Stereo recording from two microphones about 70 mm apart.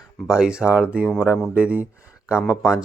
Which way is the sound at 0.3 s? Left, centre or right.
Centre.